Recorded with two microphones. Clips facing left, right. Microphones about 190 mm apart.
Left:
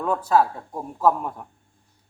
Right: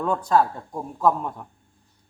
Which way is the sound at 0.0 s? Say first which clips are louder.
Even; 5° left (ahead or behind).